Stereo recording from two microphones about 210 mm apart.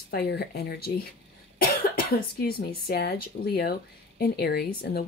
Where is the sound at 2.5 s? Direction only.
50° left (ahead or behind).